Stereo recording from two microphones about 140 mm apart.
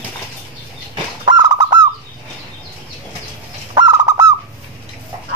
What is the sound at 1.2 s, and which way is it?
Bird, 30° right (ahead or behind).